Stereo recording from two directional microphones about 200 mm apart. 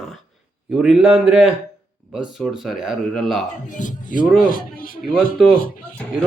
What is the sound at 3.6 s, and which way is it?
Speech, 40° left (ahead or behind).